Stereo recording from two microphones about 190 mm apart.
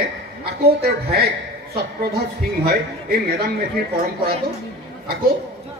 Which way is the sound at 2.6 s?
50° right (ahead or behind).